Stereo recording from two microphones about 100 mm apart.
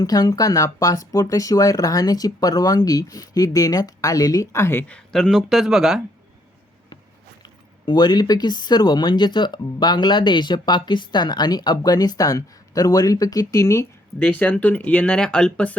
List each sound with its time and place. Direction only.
0.0 s speech: 40° left (ahead or behind); by 4.9 s 25° left (ahead or behind)
4.9 s speech: 5° left (ahead or behind)
7.4 s speech: 45° left (ahead or behind)
14.2 s speech: 15° left (ahead or behind)